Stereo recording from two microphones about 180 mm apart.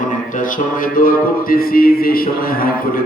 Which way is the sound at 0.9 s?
50° left (ahead or behind).